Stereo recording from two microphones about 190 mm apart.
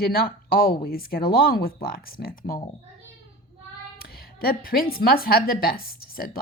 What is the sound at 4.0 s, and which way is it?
A woman's voice, 55° left (ahead or behind).